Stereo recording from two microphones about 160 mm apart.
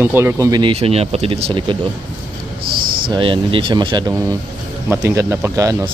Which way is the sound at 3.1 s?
35° right (ahead or behind).